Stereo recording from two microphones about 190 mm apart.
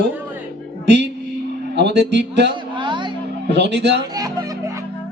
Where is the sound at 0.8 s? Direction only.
65° right (ahead or behind).